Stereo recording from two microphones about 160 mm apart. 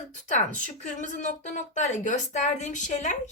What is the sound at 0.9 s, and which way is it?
A woman's voice, 50° left (ahead or behind).